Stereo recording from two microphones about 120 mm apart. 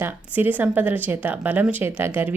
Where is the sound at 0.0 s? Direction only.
15° right (ahead or behind).